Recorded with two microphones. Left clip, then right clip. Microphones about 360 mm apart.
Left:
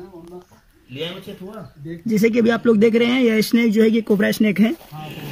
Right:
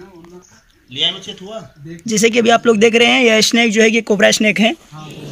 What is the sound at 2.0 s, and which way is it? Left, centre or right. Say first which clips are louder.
Speech: right 5 dB; right.